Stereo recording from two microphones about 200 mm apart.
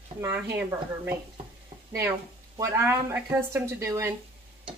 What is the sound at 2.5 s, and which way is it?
Speech, 15° right (ahead or behind).